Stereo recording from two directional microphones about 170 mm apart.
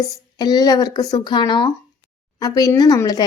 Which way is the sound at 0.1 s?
25° left (ahead or behind).